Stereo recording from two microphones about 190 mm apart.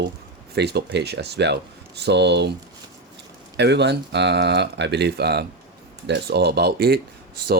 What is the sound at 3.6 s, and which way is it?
Speech, 65° right (ahead or behind).